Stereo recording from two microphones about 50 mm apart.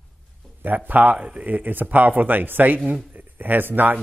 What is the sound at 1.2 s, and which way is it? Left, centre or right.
Speech, right.